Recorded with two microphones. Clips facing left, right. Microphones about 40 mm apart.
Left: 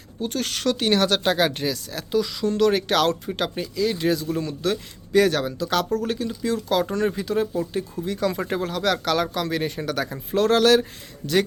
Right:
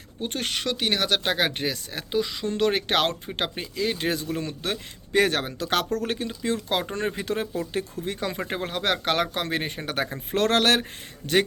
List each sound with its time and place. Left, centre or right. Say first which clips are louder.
0.2 s speech: left 2 dB; right
7.2 s speech: left 4 dB; right
8.3 s speech: left 3 dB; right
10.3 s speech: left 4 dB; right